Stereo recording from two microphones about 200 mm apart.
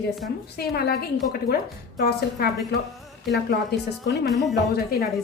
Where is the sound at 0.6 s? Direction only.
50° left (ahead or behind).